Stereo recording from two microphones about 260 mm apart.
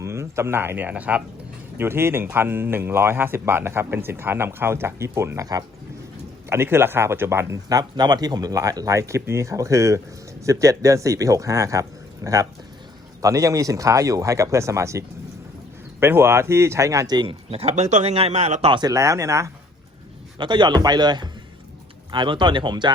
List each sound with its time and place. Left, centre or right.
0.0 s speech: centre